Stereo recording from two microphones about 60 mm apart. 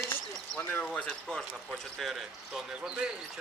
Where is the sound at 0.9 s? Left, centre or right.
Centre.